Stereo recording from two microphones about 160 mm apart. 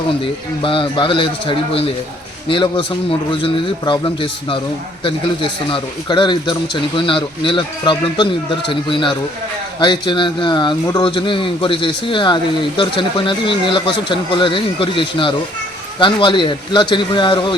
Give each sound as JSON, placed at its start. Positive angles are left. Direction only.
{"t": 0.6, "sound": "speech", "side_deg": 30}